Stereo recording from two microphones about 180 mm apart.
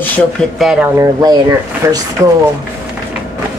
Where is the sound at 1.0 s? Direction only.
20° right (ahead or behind).